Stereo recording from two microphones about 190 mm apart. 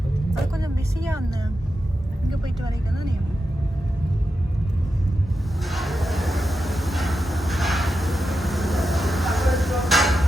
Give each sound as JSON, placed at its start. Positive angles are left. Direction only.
{"t": 0.5, "sound": "vehicle", "side_deg": -15}
{"t": 5.6, "sound": "train", "side_deg": 0}